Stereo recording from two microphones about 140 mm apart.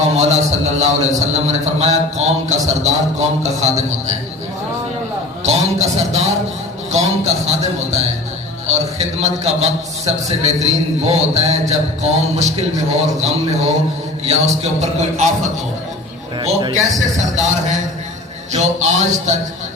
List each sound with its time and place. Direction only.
0.0 s a man's voice: 50° right (ahead or behind)
5.4 s a man's voice: 50° right (ahead or behind)
16.6 s a man's voice: 30° right (ahead or behind)
17.2 s music: 55° right (ahead or behind)